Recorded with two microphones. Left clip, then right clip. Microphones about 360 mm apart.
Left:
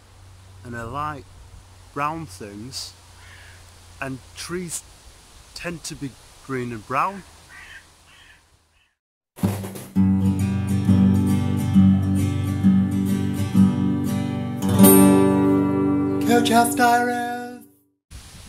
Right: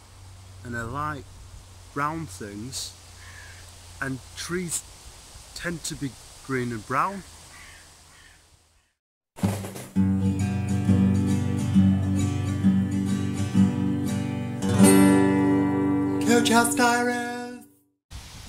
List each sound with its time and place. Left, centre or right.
0.7 s speech: centre
4.0 s speech: centre
9.9 s music: left
16.2 s music: centre